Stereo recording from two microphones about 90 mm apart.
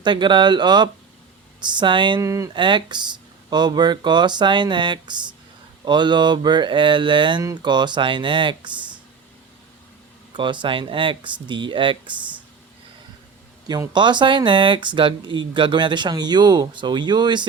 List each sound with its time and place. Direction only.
0.0 s speech: 60° right (ahead or behind)
2.2 s speech: 35° right (ahead or behind)
2.5 s speech: 60° right (ahead or behind)
7.4 s speech: 50° right (ahead or behind)
10.3 s speech: 60° right (ahead or behind)
13.7 s speech: 55° right (ahead or behind)